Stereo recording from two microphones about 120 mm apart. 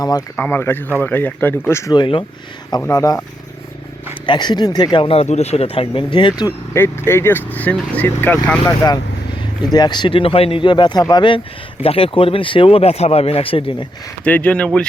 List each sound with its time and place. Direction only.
0.3 s speech: 20° left (ahead or behind)
1.9 s speech: 45° left (ahead or behind)
2.9 s speech: 30° left (ahead or behind)
4.3 s speech: 40° left (ahead or behind)
6.7 s speech: 20° left (ahead or behind)
8.6 s speech: 30° left (ahead or behind)
11.8 s speech: 50° left (ahead or behind)
14.3 s speech: 10° left (ahead or behind)